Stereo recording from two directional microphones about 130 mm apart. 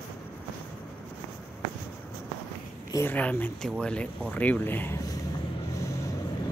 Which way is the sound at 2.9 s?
15° left (ahead or behind).